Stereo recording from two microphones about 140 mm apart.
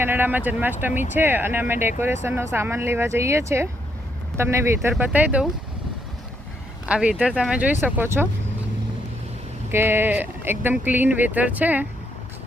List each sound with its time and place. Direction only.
0.0 s speech: 15° right (ahead or behind)
6.8 s speech: 10° right (ahead or behind)
9.7 s speech: 15° right (ahead or behind)